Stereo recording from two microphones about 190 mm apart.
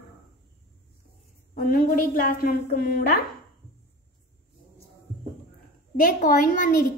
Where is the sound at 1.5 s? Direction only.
45° left (ahead or behind).